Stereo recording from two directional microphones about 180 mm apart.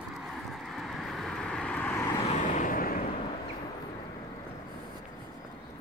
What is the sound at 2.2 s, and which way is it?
Vehicle, 40° left (ahead or behind).